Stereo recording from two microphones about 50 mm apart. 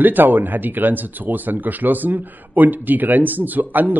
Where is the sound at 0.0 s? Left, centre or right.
Right.